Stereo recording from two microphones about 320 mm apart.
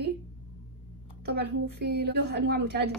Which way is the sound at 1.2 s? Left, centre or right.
Right.